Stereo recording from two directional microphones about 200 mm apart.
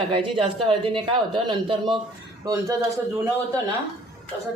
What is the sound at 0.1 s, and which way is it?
A woman's voice, 25° right (ahead or behind).